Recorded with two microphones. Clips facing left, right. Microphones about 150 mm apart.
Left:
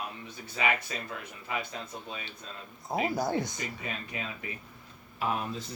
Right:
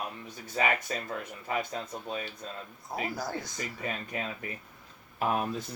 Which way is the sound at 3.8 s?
45° right (ahead or behind).